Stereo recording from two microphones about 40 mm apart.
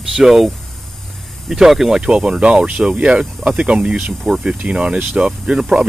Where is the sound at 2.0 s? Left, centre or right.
Right.